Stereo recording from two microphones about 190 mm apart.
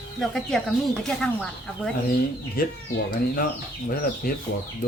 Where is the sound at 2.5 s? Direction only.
50° left (ahead or behind).